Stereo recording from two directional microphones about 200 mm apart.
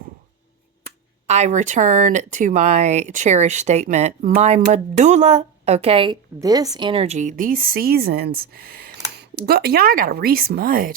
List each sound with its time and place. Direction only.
1.3 s speech: 35° right (ahead or behind)